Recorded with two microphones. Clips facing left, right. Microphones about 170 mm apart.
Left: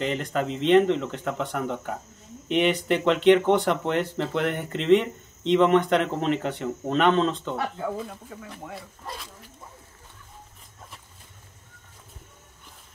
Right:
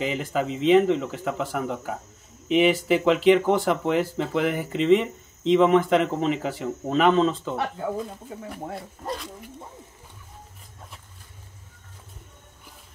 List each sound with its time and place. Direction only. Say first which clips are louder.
0.0 s speech: right 1 dB; 5° right (ahead or behind)
8.1 s speech: right 3 dB; 25° right (ahead or behind)